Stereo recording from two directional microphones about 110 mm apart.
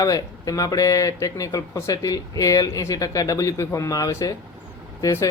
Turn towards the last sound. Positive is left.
turn(degrees=30)  # may be behind; listen again after turning